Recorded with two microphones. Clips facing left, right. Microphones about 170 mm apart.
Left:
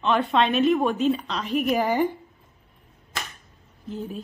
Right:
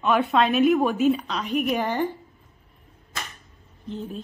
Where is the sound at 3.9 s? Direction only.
10° left (ahead or behind).